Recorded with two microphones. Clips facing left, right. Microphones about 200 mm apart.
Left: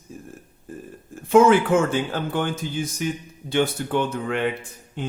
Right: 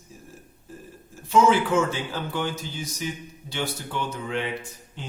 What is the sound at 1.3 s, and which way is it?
Speech, 55° left (ahead or behind).